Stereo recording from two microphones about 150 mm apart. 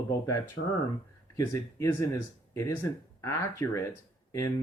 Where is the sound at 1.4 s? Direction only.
20° left (ahead or behind).